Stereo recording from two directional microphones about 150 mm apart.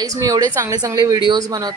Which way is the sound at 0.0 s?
25° right (ahead or behind).